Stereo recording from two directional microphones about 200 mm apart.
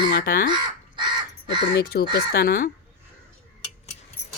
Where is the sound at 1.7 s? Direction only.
50° left (ahead or behind).